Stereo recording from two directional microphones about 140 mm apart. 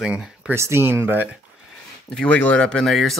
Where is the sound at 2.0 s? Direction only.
5° left (ahead or behind).